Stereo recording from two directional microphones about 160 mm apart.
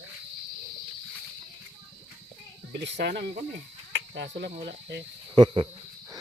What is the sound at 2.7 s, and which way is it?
Speech, 90° right.